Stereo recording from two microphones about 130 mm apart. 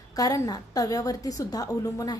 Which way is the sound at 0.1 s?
25° left (ahead or behind).